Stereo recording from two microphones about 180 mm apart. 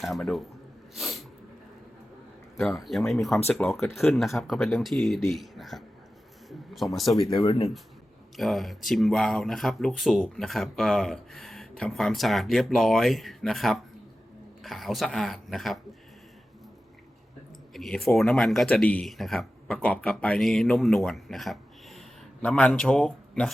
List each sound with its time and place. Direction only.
0.0 s speech: centre (ahead or behind)
0.9 s sneeze: centre (ahead or behind)
2.6 s speech: centre (ahead or behind)
7.2 s speech: 30° left (ahead or behind)
8.4 s speech: centre (ahead or behind)
17.7 s speech: centre (ahead or behind)